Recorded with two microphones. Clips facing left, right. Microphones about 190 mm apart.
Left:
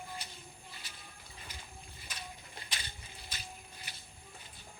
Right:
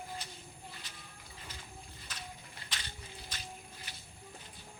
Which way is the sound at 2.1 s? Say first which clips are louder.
Left 1 dB; 10° left (ahead or behind).